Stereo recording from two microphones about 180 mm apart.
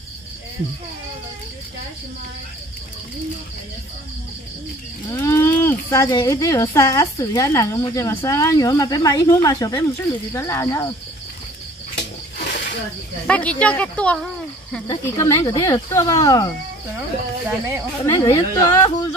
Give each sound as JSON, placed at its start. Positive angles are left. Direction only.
{"t": 5.1, "sound": "speech", "side_deg": 15}
{"t": 12.4, "sound": "snake", "side_deg": 50}
{"t": 13.3, "sound": "speech", "side_deg": 5}
{"t": 14.9, "sound": "speech", "side_deg": 15}
{"t": 17.5, "sound": "speech", "side_deg": -15}
{"t": 18.0, "sound": "speech", "side_deg": 20}